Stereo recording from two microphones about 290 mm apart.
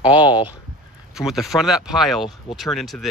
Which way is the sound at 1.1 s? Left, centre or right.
Centre.